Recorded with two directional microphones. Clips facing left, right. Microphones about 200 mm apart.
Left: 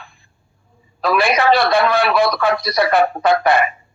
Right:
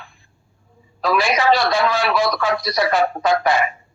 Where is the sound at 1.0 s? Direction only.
60° left (ahead or behind).